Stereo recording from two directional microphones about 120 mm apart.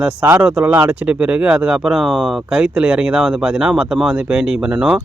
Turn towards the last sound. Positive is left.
turn(degrees=-5)  # may be behind; listen again after turning